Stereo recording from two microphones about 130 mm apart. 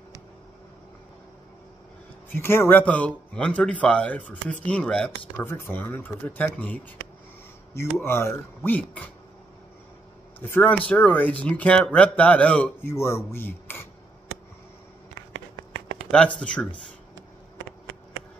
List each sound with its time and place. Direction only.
2.2 s a man's voice: 15° left (ahead or behind)
10.4 s a man's voice: 15° left (ahead or behind)
12.9 s speech: 20° left (ahead or behind)
16.1 s a man's voice: 5° left (ahead or behind)